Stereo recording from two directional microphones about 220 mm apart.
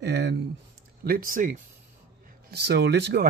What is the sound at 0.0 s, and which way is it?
Speech, 50° right (ahead or behind).